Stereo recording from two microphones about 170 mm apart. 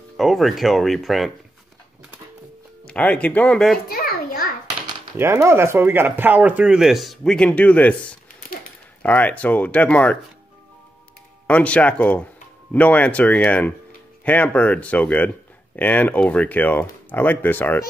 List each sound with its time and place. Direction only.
0.2 s speech: centre (ahead or behind)
2.8 s speech: 5° left (ahead or behind)
3.9 s a sound: 60° left (ahead or behind)
5.1 s speech: 15° right (ahead or behind); by 10.1 s 10° left (ahead or behind)
11.4 s speech: 5° left (ahead or behind)